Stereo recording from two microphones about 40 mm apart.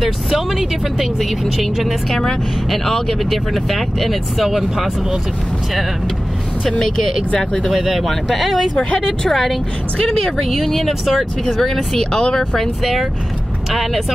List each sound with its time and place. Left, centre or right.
0.3 s speech: centre
7.3 s speech: centre
7.7 s speech: centre
8.7 s speech: centre
9.3 s speech: centre
10.4 s speech: centre
11.4 s speech: centre
12.0 s speech: centre
12.5 s speech: centre